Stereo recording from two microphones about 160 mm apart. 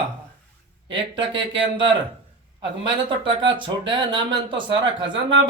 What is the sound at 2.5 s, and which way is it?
A man's voice, 30° right (ahead or behind).